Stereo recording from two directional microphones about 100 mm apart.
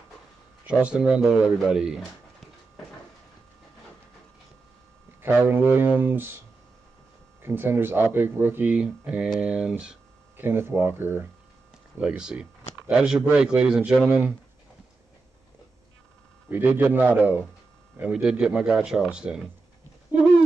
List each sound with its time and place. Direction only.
0.7 s speech: 10° right (ahead or behind)
5.2 s speech: 20° right (ahead or behind)
7.4 s speech: 25° right (ahead or behind)
8.7 s speech: 10° right (ahead or behind)
10.3 s speech: 20° right (ahead or behind)
12.0 s speech: 5° right (ahead or behind)
16.4 s speech: 20° right (ahead or behind)
20.1 s a sound: 20° right (ahead or behind)